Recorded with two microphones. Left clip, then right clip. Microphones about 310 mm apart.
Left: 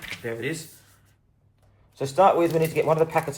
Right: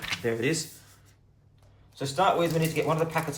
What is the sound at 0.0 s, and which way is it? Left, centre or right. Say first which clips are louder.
Speech: right 3 dB; centre.